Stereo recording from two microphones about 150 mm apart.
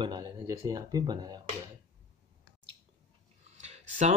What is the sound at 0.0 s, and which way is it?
Speech, 30° right (ahead or behind).